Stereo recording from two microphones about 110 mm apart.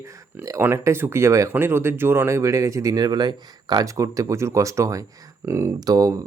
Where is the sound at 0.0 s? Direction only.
30° right (ahead or behind).